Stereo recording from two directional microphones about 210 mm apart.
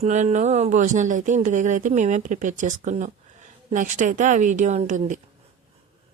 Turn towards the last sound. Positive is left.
turn(degrees=-35)  # may be behind; listen again after turning